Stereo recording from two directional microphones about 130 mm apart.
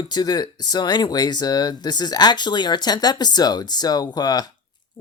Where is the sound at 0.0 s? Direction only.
30° left (ahead or behind).